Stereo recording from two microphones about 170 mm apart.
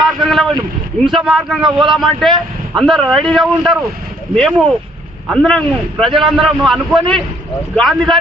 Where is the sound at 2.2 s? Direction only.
Centre (ahead or behind).